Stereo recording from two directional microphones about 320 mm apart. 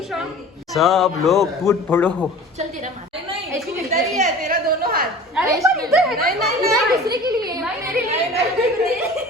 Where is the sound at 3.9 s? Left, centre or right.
Right.